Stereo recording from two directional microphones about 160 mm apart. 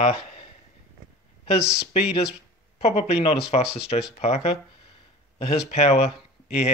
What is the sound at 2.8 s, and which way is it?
Speech, 40° left (ahead or behind).